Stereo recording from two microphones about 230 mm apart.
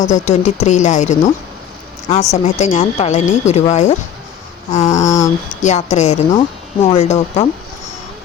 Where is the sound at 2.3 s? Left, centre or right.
Left.